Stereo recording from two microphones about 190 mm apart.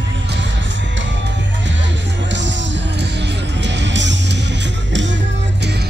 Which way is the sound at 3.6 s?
70° right (ahead or behind).